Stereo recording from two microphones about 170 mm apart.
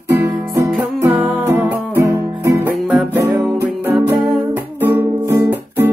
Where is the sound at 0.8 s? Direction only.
10° right (ahead or behind).